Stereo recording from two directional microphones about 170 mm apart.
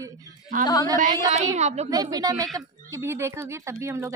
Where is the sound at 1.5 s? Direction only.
40° right (ahead or behind).